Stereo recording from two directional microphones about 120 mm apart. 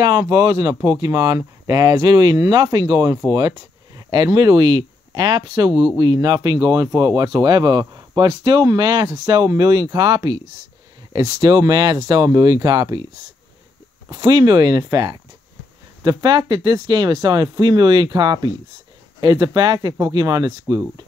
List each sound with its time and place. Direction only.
0.2 s speech: 30° right (ahead or behind)
7.8 s a sound: 30° right (ahead or behind)
8.3 s speech: 35° right (ahead or behind)
11.4 s speech: 35° right (ahead or behind)
14.0 s speech: 35° right (ahead or behind)